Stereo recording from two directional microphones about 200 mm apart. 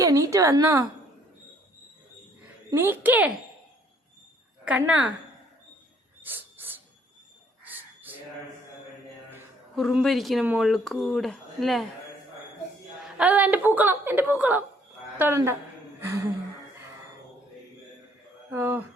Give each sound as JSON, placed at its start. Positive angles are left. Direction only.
{"t": 0.0, "sound": "a woman's voice", "side_deg": -15}
{"t": 2.6, "sound": "a woman's voice", "side_deg": -10}
{"t": 4.6, "sound": "a woman's voice", "side_deg": -5}
{"t": 7.6, "sound": "crow", "side_deg": -10}
{"t": 9.7, "sound": "speech", "side_deg": 0}
{"t": 13.1, "sound": "a woman's voice", "side_deg": -5}
{"t": 18.5, "sound": "a woman's voice", "side_deg": -10}